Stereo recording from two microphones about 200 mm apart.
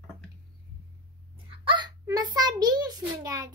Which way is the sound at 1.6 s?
25° right (ahead or behind).